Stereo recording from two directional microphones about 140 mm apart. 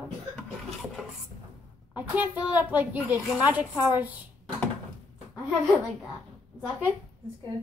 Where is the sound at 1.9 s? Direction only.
10° right (ahead or behind).